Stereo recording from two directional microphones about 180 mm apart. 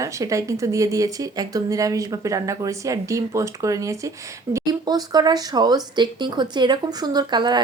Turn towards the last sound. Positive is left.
turn(degrees=-25)  # may be behind; listen again after turning